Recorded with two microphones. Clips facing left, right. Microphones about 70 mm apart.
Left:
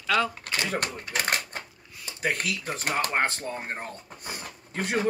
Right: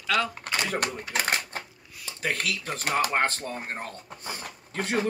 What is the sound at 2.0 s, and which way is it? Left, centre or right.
Speech, centre.